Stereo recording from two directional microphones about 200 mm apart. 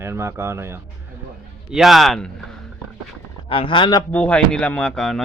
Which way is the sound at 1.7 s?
Centre (ahead or behind).